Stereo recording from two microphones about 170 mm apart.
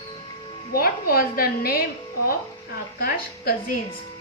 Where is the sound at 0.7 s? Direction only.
60° left (ahead or behind).